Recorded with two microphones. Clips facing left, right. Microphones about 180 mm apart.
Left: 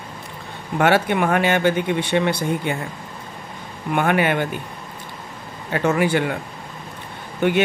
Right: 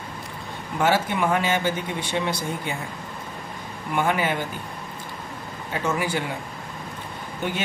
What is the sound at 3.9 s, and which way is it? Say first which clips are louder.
Speech: left 4 dB; 65° left (ahead or behind).